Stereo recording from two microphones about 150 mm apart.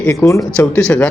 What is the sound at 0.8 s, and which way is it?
Speech, 5° left (ahead or behind).